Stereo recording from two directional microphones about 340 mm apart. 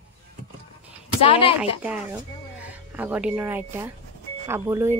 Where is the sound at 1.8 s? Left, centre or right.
Centre.